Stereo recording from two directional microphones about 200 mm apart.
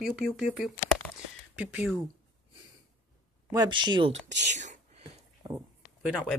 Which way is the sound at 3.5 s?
20° right (ahead or behind).